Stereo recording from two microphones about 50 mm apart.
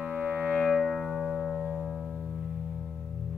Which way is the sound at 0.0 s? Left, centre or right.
Right.